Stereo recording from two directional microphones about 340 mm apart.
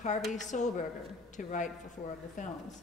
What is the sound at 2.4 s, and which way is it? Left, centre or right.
Speech, left.